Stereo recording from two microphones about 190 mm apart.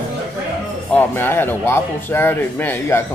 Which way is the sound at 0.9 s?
10° left (ahead or behind).